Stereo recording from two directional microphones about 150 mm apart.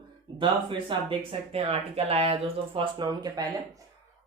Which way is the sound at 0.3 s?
35° right (ahead or behind).